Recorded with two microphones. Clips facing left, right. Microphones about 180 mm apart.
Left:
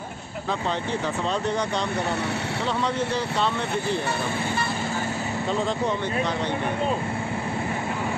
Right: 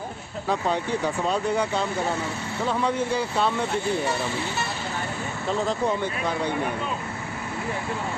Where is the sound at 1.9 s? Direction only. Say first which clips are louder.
Left 1 dB; 70° left (ahead or behind).